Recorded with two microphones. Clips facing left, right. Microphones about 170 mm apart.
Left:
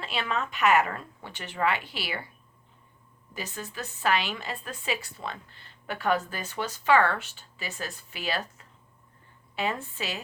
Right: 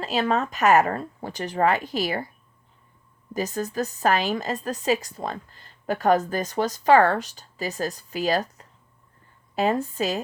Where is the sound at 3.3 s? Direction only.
40° right (ahead or behind).